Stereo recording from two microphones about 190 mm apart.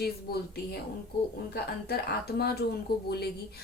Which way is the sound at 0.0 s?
55° left (ahead or behind).